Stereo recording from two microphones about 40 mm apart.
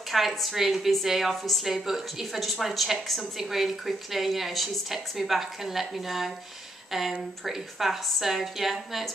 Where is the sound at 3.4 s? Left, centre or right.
Centre.